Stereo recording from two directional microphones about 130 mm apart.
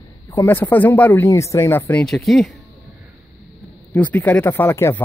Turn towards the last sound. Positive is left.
turn(degrees=20)  # may be behind; listen again after turning